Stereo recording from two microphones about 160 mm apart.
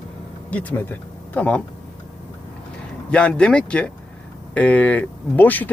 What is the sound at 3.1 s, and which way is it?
Speech, 5° left (ahead or behind).